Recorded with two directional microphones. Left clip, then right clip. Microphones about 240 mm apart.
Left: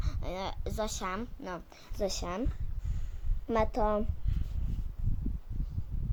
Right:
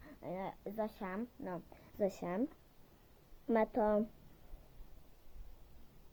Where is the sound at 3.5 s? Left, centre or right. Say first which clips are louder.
Left 3 dB; centre.